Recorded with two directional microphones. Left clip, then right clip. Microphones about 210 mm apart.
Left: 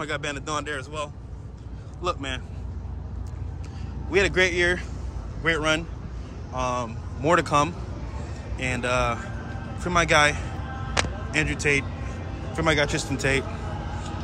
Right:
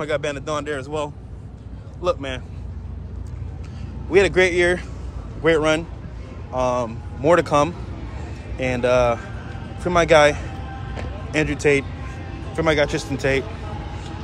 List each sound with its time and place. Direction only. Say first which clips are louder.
0.0 s speech: right 6 dB; 15° left (ahead or behind)
2.0 s speech: right 5 dB; 15° left (ahead or behind)
4.1 s speech: right 5 dB; 10° left (ahead or behind)
11.3 s a man's voice: right 5 dB; 10° left (ahead or behind)